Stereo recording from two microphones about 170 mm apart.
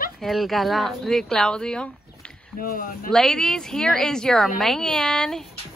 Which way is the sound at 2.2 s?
5° left (ahead or behind).